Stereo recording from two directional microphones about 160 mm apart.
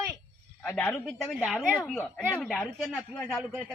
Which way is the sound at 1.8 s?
5° left (ahead or behind).